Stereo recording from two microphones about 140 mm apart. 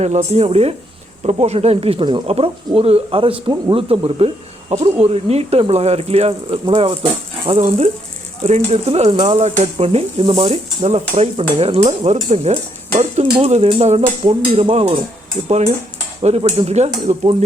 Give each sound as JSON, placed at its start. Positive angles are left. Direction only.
{"t": 0.0, "sound": "stir", "side_deg": -50}
{"t": 3.5, "sound": "speech", "side_deg": -40}
{"t": 4.8, "sound": "stir", "side_deg": -45}